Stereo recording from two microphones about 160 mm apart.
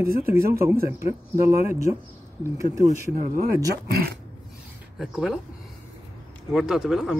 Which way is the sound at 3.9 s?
70° right (ahead or behind).